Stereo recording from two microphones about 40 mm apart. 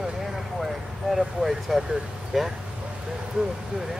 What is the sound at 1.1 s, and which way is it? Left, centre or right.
Speech, centre.